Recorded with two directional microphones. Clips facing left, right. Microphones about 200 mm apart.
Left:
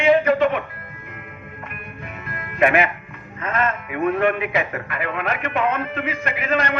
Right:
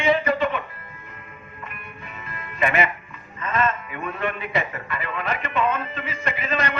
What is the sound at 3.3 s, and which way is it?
A man's voice, 65° left (ahead or behind).